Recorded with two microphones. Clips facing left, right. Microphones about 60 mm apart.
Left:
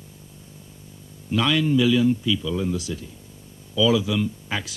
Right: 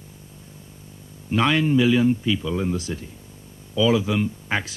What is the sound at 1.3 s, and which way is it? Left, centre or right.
Speech, right.